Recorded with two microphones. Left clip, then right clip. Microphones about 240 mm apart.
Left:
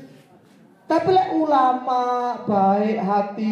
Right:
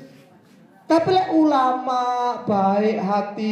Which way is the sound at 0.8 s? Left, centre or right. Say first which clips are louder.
Even; right.